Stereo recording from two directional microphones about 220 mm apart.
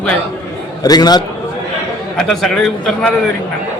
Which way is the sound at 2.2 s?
Centre (ahead or behind).